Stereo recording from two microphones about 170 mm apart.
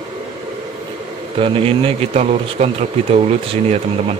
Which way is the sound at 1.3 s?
30° right (ahead or behind).